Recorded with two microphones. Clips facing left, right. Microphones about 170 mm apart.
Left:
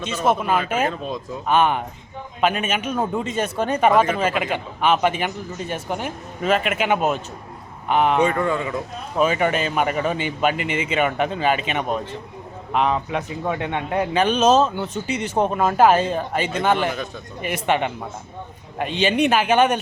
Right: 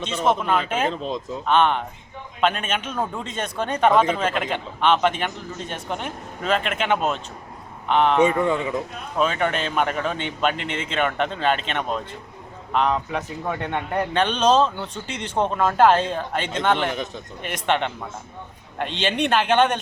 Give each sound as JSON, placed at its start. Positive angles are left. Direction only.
{"t": 0.0, "sound": "a man's voice", "side_deg": 5}
{"t": 8.2, "sound": "a man's voice", "side_deg": -15}
{"t": 9.1, "sound": "speech", "side_deg": 5}